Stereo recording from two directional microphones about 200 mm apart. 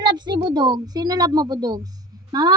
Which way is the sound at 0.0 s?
20° right (ahead or behind).